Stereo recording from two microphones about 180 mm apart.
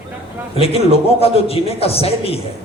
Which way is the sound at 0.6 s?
35° left (ahead or behind).